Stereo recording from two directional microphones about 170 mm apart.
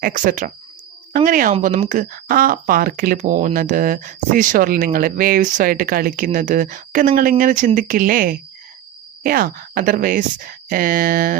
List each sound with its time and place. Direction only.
0.0 s speech: 55° right (ahead or behind)